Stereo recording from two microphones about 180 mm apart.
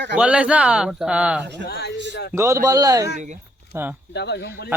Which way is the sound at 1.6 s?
60° left (ahead or behind).